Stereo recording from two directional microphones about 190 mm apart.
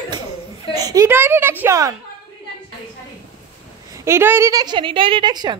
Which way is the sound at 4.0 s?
15° right (ahead or behind).